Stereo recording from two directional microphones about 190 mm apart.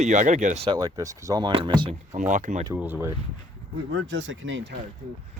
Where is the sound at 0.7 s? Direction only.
20° right (ahead or behind).